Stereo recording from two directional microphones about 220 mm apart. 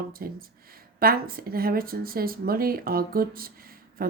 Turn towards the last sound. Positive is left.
turn(degrees=-40)  # may be behind; listen again after turning